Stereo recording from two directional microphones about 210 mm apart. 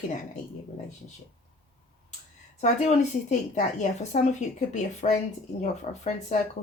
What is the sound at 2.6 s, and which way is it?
A woman's voice, 35° left (ahead or behind).